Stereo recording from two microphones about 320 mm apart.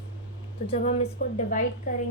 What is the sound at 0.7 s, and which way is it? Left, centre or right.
A woman's voice, centre.